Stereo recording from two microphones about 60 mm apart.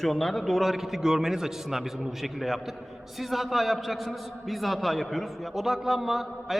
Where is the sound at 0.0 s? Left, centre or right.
Centre.